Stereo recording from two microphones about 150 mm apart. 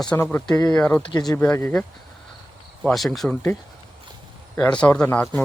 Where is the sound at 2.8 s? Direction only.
5° left (ahead or behind).